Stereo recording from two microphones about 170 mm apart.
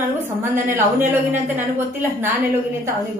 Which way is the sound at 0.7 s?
10° right (ahead or behind).